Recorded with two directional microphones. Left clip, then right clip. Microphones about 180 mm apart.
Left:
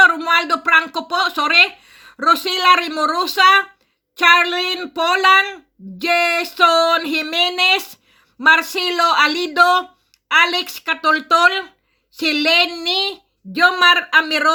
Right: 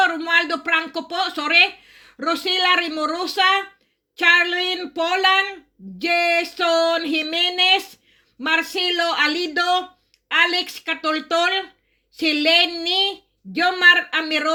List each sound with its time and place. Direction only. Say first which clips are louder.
0.0 s speech: left 5 dB; 40° left (ahead or behind)